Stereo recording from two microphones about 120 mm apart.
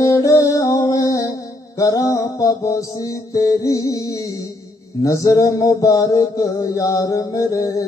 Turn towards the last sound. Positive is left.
turn(degrees=25)  # may be behind; listen again after turning